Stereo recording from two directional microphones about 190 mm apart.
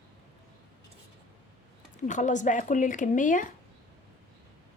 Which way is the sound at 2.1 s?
40° left (ahead or behind).